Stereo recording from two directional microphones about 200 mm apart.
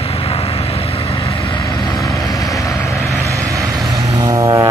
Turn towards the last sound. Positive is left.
turn(degrees=-15)  # may be behind; listen again after turning